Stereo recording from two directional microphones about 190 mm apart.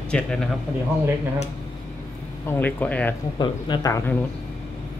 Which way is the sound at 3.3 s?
25° left (ahead or behind).